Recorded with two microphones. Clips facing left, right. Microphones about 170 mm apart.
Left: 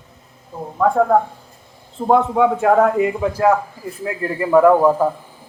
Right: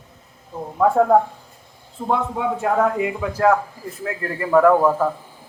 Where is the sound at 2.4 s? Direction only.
90° left.